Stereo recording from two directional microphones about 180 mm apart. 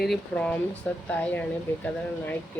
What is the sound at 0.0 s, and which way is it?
Speech, centre (ahead or behind).